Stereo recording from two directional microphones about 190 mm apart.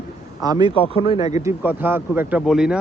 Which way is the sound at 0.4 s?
20° right (ahead or behind).